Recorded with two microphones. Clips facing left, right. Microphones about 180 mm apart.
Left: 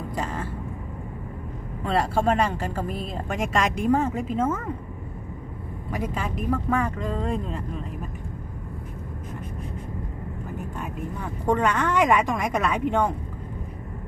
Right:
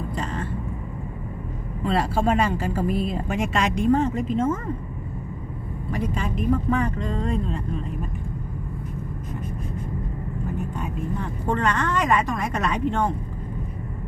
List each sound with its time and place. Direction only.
0.2 s vehicle: 10° left (ahead or behind)
1.8 s speech: centre (ahead or behind)
5.9 s a woman's voice: 10° left (ahead or behind)
10.8 s a woman's voice: 10° left (ahead or behind)